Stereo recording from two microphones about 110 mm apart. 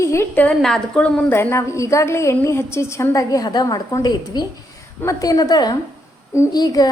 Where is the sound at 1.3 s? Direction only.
25° left (ahead or behind).